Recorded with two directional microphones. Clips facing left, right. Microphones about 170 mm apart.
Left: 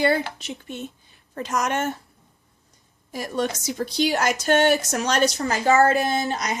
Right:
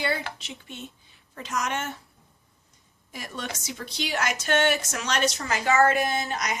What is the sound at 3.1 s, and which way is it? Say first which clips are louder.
A woman's voice: left 10 dB; 40° left (ahead or behind).